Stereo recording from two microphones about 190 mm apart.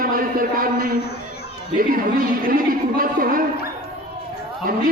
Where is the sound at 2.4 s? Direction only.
50° right (ahead or behind).